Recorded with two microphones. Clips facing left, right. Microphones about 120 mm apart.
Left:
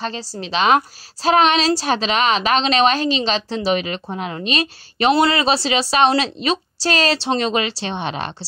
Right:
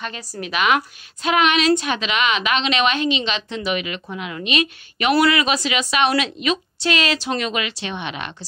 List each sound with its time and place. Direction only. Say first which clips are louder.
0.0 s a woman's voice: left 3 dB; 30° left (ahead or behind)